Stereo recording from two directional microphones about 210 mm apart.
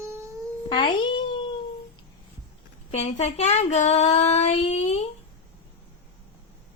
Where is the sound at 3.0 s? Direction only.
30° left (ahead or behind).